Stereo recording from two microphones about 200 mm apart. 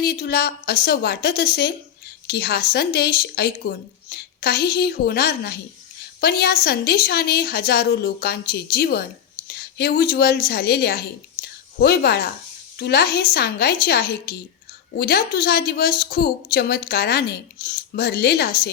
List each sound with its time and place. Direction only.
0.0 s a woman's voice: 50° left (ahead or behind)